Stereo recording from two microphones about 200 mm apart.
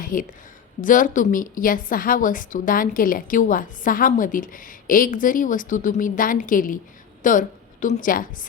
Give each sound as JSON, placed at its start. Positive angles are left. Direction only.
{"t": 0.0, "sound": "a woman's voice", "side_deg": 40}